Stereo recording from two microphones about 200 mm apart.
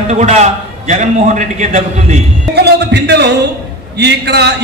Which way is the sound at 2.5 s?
55° right (ahead or behind).